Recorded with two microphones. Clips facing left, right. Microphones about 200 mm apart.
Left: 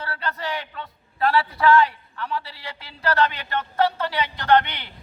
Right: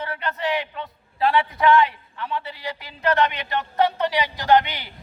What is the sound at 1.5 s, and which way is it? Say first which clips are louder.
A man's voice: left 1 dB; 15° right (ahead or behind).